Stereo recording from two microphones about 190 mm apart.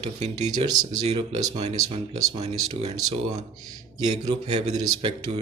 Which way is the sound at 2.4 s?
35° right (ahead or behind).